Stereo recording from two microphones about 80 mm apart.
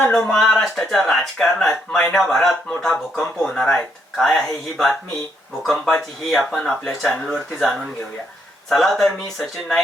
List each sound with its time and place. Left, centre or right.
0.1 s speech: centre